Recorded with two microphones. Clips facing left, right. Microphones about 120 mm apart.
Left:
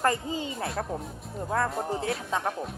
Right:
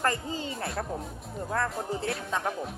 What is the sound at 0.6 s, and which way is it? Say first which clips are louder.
Speech: left 1 dB; centre (ahead or behind).